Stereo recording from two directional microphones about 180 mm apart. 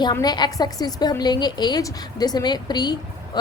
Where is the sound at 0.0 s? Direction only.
20° left (ahead or behind).